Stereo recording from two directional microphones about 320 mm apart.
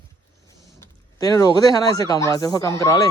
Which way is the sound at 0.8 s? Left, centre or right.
Centre.